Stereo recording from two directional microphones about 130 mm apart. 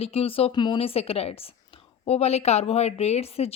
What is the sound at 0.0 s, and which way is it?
Speech, 50° left (ahead or behind).